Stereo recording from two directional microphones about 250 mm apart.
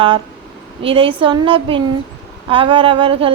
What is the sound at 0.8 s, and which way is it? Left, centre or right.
Speech, right.